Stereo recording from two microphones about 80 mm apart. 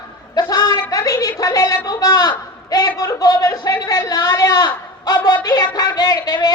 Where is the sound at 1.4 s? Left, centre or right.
Left.